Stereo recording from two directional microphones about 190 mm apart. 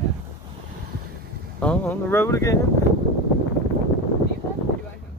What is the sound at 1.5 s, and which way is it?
Speech, 5° left (ahead or behind).